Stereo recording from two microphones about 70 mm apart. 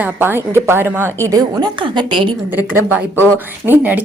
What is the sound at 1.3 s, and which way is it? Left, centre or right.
Speech, right.